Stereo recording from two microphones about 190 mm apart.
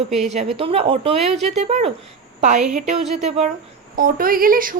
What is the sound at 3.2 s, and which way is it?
Speech, 35° right (ahead or behind).